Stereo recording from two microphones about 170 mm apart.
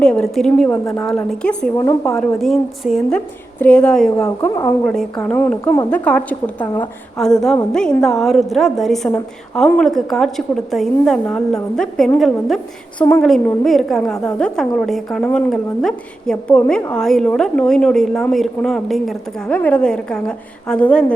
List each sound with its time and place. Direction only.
0.0 s a woman's voice: 5° left (ahead or behind)
1.7 s a woman's voice: 20° left (ahead or behind)
2.1 s a woman's voice: centre (ahead or behind)
4.2 s a woman's voice: 15° left (ahead or behind)
4.9 s a woman's voice: 5° left (ahead or behind)